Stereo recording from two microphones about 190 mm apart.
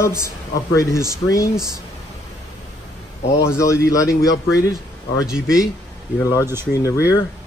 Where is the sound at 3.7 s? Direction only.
15° left (ahead or behind).